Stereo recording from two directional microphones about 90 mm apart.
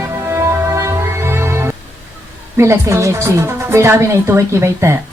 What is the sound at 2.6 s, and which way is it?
Speech, 30° right (ahead or behind).